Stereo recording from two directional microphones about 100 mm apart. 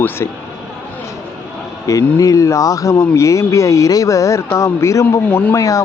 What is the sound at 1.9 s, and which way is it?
Speech, 35° left (ahead or behind).